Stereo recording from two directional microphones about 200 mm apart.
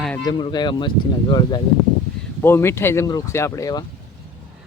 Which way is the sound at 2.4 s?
10° left (ahead or behind).